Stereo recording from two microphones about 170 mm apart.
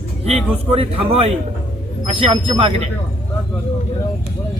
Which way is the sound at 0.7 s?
35° right (ahead or behind).